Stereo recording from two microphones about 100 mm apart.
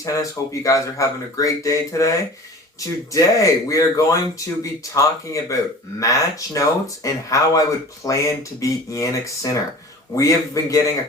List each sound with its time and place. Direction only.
0.0 s speech: 35° left (ahead or behind)